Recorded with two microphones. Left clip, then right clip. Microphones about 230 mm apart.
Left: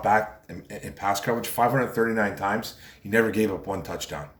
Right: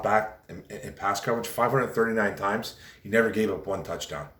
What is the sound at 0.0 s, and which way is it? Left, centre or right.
Speech, centre.